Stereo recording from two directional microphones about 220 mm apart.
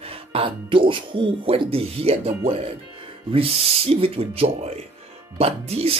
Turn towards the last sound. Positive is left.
turn(degrees=-25)  # may be behind; listen again after turning